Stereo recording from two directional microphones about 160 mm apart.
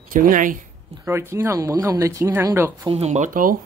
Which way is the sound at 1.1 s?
15° right (ahead or behind).